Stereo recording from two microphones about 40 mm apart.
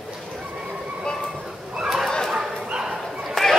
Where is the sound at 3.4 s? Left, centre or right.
Centre.